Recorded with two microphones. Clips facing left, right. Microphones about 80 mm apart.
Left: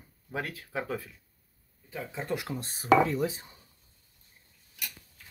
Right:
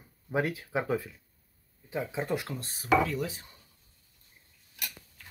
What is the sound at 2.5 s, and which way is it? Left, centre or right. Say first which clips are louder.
Speech: left 4 dB; left.